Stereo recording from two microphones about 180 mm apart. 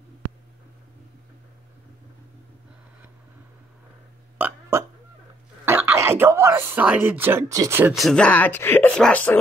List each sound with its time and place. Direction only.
4.4 s burping: 15° right (ahead or behind)
5.7 s speech: 10° right (ahead or behind)
7.9 s speech: centre (ahead or behind)